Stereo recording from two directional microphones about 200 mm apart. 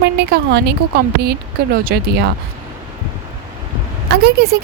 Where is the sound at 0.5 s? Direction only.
55° right (ahead or behind).